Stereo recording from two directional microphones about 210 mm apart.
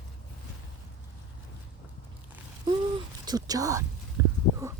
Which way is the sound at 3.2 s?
20° right (ahead or behind).